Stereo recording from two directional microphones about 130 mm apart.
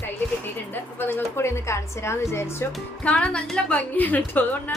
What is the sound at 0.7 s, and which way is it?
A woman's voice, 15° left (ahead or behind).